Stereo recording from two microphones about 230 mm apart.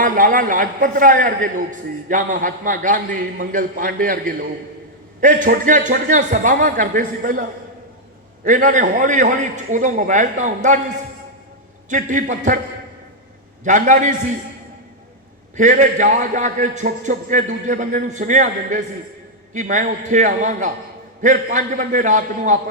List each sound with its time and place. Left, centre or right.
0.0 s a man's voice: right
8.4 s a man's voice: right
11.9 s a man's voice: right
13.7 s a man's voice: right
15.5 s a man's voice: right